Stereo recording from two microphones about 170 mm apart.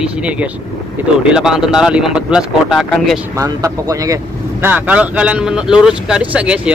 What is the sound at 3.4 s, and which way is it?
Speech, 20° right (ahead or behind).